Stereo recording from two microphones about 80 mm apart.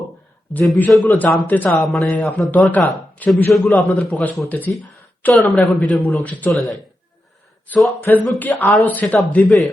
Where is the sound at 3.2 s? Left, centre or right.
Left.